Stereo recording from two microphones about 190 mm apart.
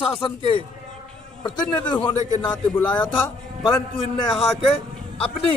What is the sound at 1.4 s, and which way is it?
Speech, 25° left (ahead or behind).